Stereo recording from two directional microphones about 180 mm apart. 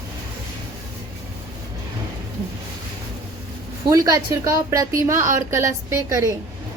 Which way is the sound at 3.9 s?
20° right (ahead or behind).